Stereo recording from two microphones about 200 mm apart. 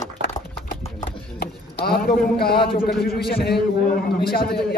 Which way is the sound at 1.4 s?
50° left (ahead or behind).